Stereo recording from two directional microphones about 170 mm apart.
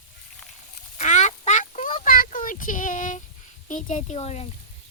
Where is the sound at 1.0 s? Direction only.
45° left (ahead or behind).